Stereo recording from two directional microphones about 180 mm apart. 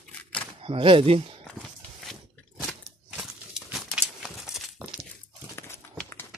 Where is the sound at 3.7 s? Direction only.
Centre (ahead or behind).